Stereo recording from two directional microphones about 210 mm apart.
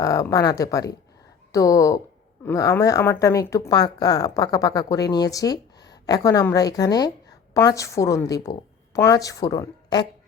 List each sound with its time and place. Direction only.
0.0 s speech: 15° left (ahead or behind)